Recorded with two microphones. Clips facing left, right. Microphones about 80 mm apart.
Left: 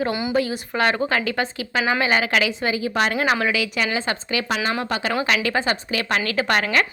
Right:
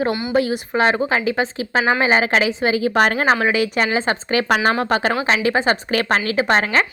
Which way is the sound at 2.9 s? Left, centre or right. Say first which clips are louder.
Right 3 dB; right.